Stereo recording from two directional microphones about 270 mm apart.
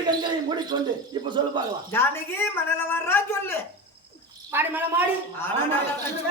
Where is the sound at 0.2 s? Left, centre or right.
Centre.